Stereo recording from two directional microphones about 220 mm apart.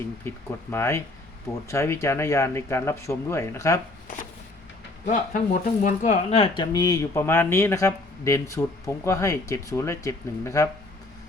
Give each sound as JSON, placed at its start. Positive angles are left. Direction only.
{"t": 0.3, "sound": "speech", "side_deg": 10}
{"t": 5.0, "sound": "speech", "side_deg": 35}